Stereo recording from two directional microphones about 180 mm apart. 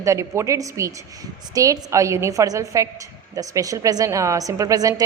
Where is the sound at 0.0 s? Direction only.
15° right (ahead or behind).